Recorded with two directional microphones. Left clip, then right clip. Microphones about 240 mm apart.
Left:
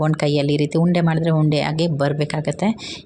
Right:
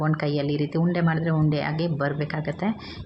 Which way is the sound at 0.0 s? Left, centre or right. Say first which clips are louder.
Left 6 dB; left.